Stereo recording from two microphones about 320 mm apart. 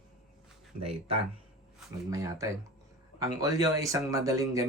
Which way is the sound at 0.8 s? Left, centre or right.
Centre.